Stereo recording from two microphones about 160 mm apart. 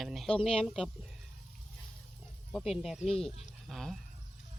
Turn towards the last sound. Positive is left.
turn(degrees=0)  # may be behind; listen again after turning